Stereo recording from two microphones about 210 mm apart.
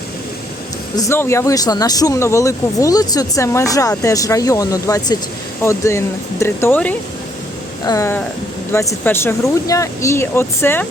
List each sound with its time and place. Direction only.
0.9 s speech: 15° left (ahead or behind)